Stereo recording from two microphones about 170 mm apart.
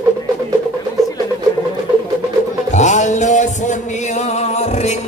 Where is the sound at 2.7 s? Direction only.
45° left (ahead or behind).